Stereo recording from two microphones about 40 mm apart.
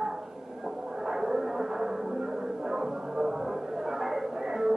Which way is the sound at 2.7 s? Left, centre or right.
Centre.